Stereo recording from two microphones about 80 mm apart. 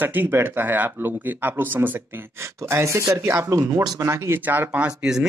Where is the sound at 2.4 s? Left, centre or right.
Right.